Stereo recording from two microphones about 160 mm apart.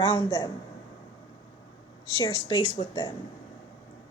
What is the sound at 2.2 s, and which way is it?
Speech, 25° left (ahead or behind).